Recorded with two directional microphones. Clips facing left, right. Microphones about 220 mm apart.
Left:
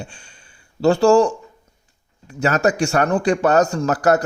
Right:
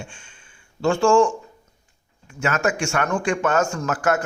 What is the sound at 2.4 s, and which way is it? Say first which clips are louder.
A man's voice: left 5 dB; 35° left (ahead or behind).